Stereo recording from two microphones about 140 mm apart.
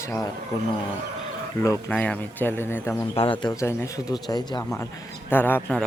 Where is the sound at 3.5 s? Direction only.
20° left (ahead or behind).